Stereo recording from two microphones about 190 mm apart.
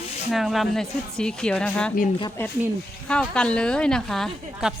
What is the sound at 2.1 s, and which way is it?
Speech, 20° left (ahead or behind).